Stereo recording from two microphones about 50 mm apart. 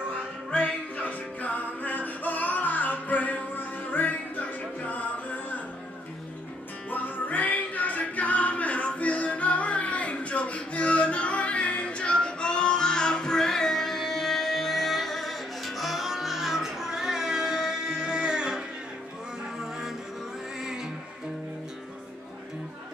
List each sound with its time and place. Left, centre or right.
0.7 s music: left
6.9 s music: left; by 18.6 s centre